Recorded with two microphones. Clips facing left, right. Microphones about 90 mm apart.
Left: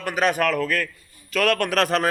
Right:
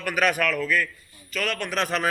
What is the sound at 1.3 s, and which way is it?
Speech, 85° left.